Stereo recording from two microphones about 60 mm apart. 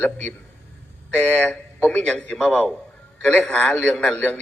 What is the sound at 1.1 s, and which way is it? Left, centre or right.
Speech, left.